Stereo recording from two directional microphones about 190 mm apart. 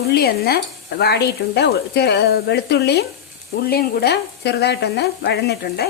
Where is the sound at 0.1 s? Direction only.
55° left (ahead or behind).